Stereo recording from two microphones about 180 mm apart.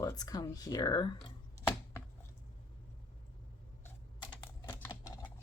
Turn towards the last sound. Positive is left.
turn(degrees=20)  # may be behind; listen again after turning